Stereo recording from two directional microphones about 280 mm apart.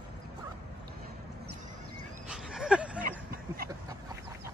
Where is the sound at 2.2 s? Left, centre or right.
Centre.